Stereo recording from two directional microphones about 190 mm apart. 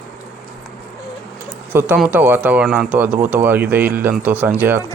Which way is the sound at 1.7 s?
10° right (ahead or behind).